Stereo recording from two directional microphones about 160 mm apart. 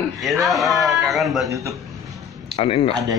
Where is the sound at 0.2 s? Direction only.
Centre (ahead or behind).